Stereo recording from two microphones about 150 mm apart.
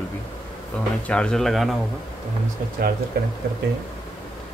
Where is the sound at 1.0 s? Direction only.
5° left (ahead or behind).